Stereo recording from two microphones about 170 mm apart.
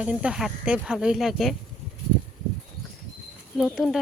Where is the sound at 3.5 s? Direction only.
Centre (ahead or behind).